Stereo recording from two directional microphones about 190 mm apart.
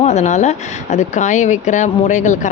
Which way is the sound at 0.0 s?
35° left (ahead or behind).